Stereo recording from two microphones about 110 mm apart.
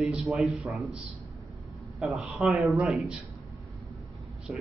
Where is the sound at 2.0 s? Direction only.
Centre (ahead or behind).